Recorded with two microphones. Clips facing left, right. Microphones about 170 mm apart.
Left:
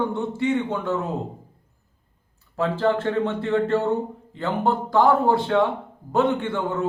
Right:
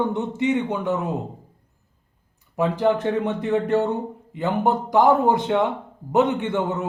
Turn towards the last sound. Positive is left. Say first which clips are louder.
# right 1 dB
turn(degrees=-20)  # may be behind; listen again after turning